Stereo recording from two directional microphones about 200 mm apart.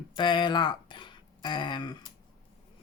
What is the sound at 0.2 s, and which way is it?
Speech, 25° left (ahead or behind).